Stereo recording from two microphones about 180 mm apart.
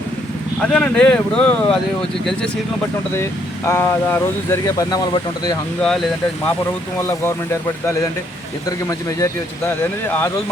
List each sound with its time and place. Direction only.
0.6 s speech: 5° left (ahead or behind)
3.7 s speech: 15° left (ahead or behind)
8.9 s speech: 20° left (ahead or behind)